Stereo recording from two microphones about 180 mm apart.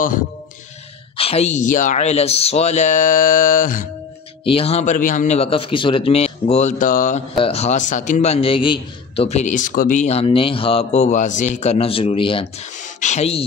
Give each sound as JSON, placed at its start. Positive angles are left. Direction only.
{"t": 1.1, "sound": "a man's voice", "side_deg": 35}
{"t": 4.5, "sound": "a man's voice", "side_deg": 35}
{"t": 7.3, "sound": "a man's voice", "side_deg": 35}